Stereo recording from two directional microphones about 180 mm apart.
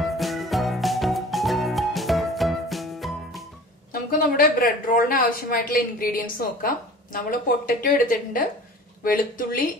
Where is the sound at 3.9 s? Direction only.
50° left (ahead or behind).